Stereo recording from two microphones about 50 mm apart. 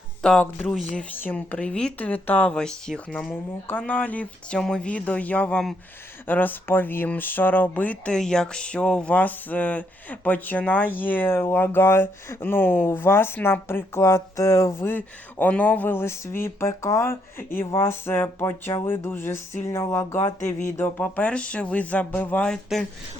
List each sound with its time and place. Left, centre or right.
0.2 s speech: centre
1.1 s speech: left
1.5 s speech: left
2.0 s speech: left
2.5 s speech: centre
3.7 s speech: left
6.2 s speech: left
8.0 s speech: centre
9.1 s speech: left
14.8 s speech: left
15.9 s speech: left
19.6 s speech: left
21.0 s speech: left
22.7 s speech: centre